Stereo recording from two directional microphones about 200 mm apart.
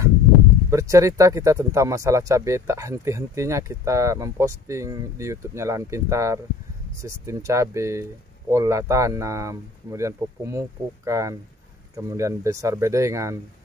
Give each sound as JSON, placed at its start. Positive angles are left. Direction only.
{"t": 0.7, "sound": "speech", "side_deg": -15}